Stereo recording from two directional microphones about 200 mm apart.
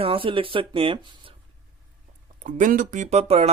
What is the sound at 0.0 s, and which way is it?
Speech, 25° right (ahead or behind).